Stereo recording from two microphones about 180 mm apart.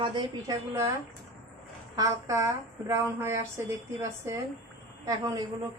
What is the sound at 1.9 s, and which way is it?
A woman's voice, 20° right (ahead or behind).